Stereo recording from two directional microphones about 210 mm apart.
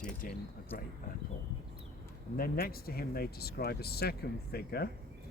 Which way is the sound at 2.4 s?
45° left (ahead or behind).